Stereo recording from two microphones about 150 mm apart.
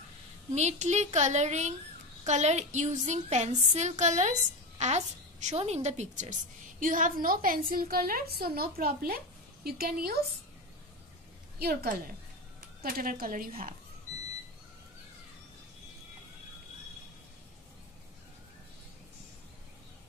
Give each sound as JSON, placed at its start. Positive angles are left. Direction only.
{"t": 0.6, "sound": "a woman's voice", "side_deg": -50}
{"t": 6.8, "sound": "a woman's voice", "side_deg": -60}
{"t": 11.5, "sound": "a woman's voice", "side_deg": -90}
{"t": 12.5, "sound": "a woman's voice", "side_deg": -65}